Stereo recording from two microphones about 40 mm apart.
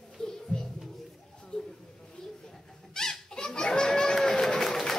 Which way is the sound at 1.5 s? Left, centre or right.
Centre.